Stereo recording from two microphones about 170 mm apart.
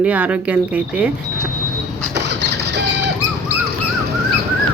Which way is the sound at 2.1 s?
90° right.